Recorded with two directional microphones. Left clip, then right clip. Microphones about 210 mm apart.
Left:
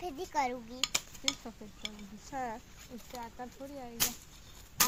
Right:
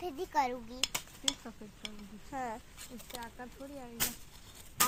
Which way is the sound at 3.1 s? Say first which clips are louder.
Left 2 dB; 10° left (ahead or behind).